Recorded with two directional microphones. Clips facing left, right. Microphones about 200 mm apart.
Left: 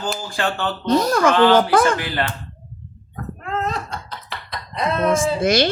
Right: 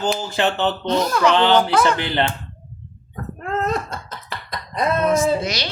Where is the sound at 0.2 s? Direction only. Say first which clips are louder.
Right 3 dB; 20° right (ahead or behind).